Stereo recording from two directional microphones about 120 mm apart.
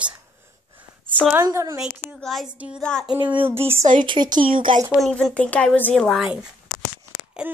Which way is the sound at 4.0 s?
40° right (ahead or behind).